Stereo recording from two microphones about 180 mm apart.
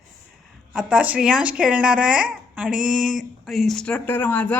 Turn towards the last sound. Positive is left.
turn(degrees=10)  # may be behind; listen again after turning